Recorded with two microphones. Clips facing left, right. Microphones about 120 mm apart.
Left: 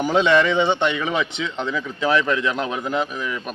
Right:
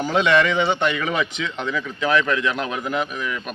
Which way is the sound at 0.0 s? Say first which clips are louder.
Left 1 dB; 20° left (ahead or behind).